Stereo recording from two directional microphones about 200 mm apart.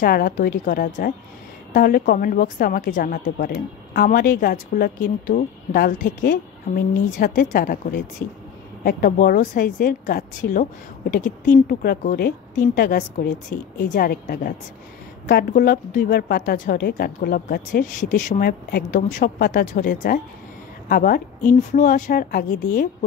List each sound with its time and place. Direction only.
0.0 s a woman's voice: 50° left (ahead or behind)